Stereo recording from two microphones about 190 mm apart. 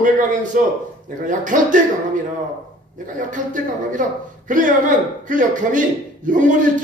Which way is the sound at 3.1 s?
45° right (ahead or behind).